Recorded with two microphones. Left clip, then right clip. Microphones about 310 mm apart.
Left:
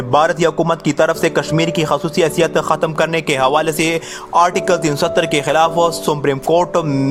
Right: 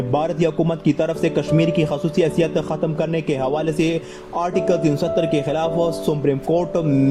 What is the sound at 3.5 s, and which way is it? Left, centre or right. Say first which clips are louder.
Speech: left 5 dB; left.